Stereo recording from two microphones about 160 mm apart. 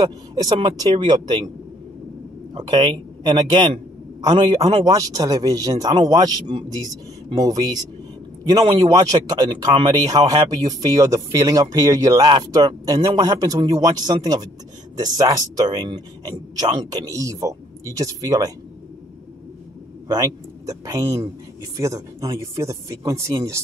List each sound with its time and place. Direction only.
0.0 s speech: 25° right (ahead or behind)
2.5 s speech: 25° right (ahead or behind)
20.1 s speech: 20° right (ahead or behind)